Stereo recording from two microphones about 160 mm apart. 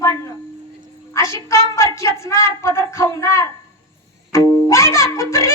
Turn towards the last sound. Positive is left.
turn(degrees=15)  # may be behind; listen again after turning